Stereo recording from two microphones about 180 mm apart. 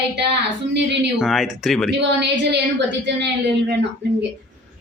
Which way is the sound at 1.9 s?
75° right (ahead or behind).